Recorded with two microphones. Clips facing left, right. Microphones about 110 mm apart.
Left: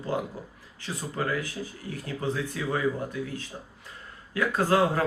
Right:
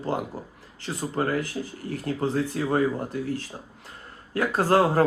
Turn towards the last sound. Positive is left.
turn(degrees=-35)  # may be behind; listen again after turning